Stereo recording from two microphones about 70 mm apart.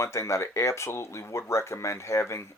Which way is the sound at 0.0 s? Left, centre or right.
Left.